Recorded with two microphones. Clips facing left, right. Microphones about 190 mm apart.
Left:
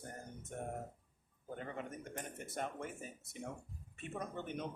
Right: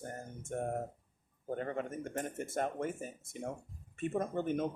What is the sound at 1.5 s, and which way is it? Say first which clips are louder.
Speech: right 7 dB; 45° right (ahead or behind).